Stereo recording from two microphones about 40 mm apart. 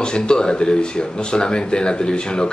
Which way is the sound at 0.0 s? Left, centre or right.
Left.